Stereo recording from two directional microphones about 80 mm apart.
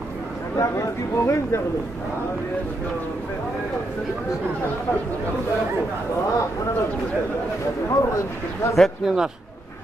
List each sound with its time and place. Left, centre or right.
0.6 s speech: left
7.9 s speech: left
8.7 s speech: centre